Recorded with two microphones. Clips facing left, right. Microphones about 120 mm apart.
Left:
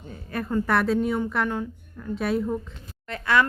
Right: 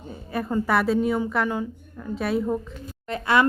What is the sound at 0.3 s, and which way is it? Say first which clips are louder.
A woman's voice: right 1 dB; 5° right (ahead or behind).